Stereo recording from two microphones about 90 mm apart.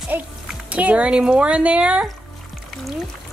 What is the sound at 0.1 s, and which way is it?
A woman's voice, 20° right (ahead or behind).